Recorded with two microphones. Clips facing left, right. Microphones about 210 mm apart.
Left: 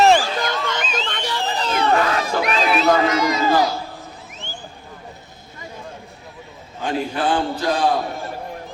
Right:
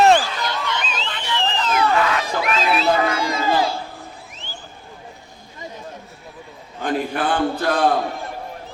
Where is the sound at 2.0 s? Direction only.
40° left (ahead or behind).